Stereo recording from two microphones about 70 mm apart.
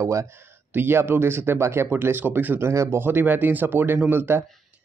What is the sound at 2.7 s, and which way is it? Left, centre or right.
Speech, right.